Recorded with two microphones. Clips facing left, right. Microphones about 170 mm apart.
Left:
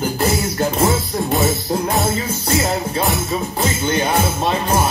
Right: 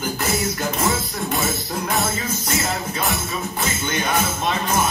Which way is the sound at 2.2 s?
30° left (ahead or behind).